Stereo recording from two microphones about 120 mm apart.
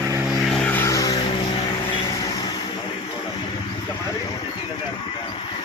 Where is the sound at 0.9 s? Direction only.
30° left (ahead or behind).